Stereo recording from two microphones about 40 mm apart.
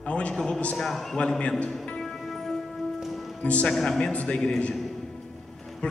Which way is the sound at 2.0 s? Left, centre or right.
Centre.